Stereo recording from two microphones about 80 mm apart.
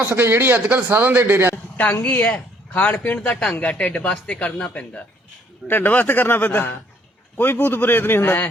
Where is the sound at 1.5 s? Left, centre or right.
Centre.